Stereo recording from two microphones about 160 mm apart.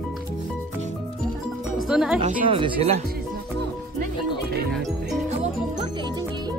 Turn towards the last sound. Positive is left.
turn(degrees=0)  # may be behind; listen again after turning